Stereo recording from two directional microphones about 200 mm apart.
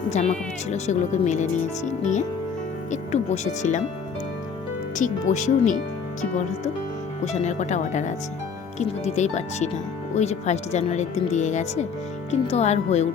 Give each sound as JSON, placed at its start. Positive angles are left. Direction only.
{"t": 0.1, "sound": "speech", "side_deg": 35}
{"t": 4.9, "sound": "speech", "side_deg": 40}
{"t": 7.4, "sound": "speech", "side_deg": 35}